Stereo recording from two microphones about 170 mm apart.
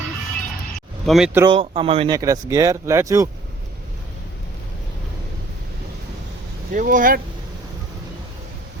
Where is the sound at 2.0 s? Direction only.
20° right (ahead or behind).